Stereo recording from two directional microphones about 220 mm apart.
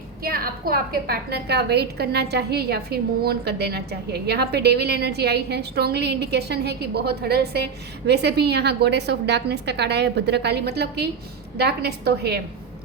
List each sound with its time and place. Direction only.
0.2 s a woman's voice: 45° right (ahead or behind)